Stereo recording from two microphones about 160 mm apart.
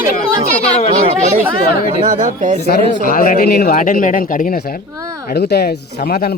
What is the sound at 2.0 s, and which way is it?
Speech, 55° right (ahead or behind).